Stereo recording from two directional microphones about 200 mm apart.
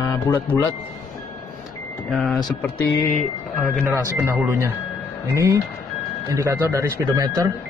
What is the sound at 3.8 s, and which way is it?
Speech, 15° right (ahead or behind).